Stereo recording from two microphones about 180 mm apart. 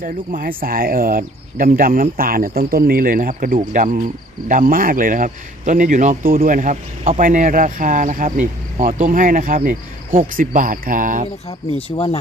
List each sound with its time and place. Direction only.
0.0 s speech: 50° right (ahead or behind)
11.4 s speech: 35° left (ahead or behind)